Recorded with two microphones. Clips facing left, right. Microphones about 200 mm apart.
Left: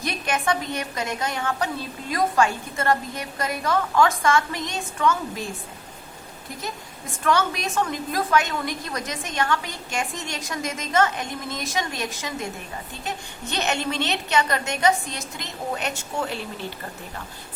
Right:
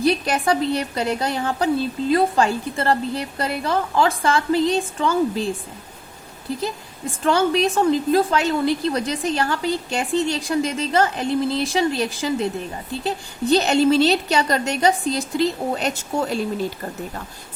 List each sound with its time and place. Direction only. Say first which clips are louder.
0.0 s a woman's voice: right 7 dB; 35° right (ahead or behind)
7.3 s a woman's voice: right 5 dB; 30° right (ahead or behind)